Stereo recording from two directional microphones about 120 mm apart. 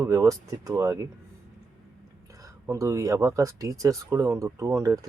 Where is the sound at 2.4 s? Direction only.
25° right (ahead or behind).